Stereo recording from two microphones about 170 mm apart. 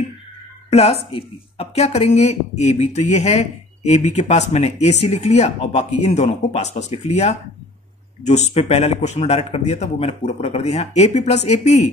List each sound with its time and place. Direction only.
0.7 s speech: 35° left (ahead or behind)